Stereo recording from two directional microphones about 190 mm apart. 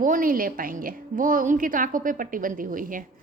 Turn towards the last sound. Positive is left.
turn(degrees=-45)  # may be behind; listen again after turning